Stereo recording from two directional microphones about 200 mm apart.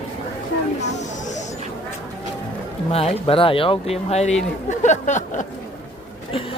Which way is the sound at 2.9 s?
30° left (ahead or behind).